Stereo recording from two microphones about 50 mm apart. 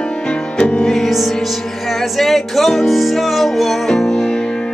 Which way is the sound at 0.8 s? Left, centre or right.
Centre.